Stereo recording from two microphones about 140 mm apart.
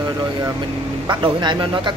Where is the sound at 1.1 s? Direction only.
30° right (ahead or behind).